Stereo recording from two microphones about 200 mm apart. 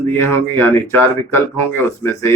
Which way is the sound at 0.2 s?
10° left (ahead or behind).